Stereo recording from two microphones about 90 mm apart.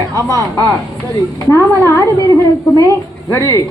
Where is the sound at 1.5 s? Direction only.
30° left (ahead or behind).